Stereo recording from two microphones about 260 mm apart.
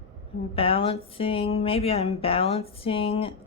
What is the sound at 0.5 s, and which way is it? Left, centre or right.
Speech, left.